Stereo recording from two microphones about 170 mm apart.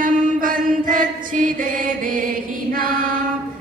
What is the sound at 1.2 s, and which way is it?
Chant, 50° right (ahead or behind).